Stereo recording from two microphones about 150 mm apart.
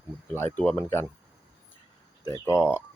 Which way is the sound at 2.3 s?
15° left (ahead or behind).